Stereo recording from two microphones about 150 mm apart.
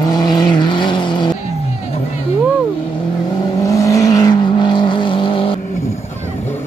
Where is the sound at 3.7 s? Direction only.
20° left (ahead or behind).